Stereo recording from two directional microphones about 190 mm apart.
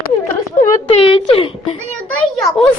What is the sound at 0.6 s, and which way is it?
Speech, 30° left (ahead or behind).